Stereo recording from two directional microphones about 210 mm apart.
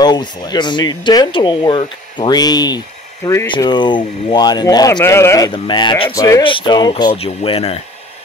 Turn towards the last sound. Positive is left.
turn(degrees=30)  # may be behind; listen again after turning